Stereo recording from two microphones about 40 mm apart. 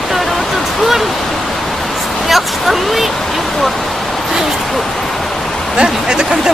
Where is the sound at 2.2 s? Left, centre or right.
Centre.